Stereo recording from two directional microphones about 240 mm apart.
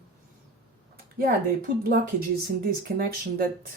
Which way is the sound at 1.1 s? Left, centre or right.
Right.